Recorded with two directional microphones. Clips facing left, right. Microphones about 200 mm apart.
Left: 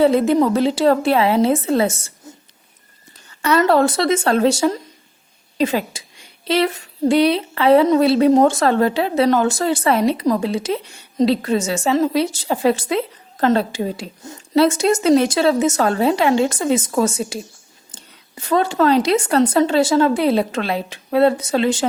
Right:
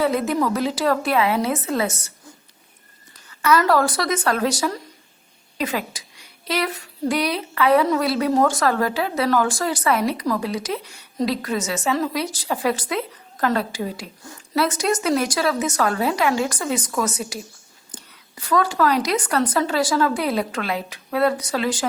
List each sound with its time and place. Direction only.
0.0 s a woman's voice: 30° left (ahead or behind)